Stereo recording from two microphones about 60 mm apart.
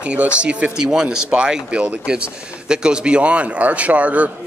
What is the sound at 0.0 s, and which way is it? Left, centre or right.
Speech, right.